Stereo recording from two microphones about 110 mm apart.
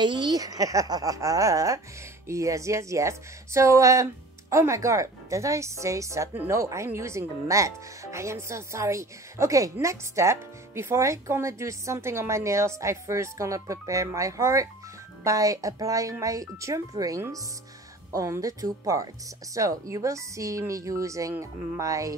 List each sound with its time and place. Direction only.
0.0 s speech: 45° right (ahead or behind)